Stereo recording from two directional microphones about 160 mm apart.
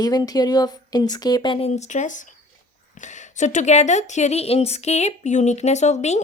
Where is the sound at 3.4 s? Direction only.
50° left (ahead or behind).